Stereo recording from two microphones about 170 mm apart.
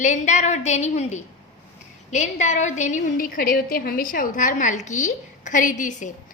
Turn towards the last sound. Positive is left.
turn(degrees=45)  # may be behind; listen again after turning